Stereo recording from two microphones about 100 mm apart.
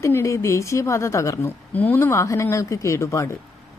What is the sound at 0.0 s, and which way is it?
Speech, 30° left (ahead or behind).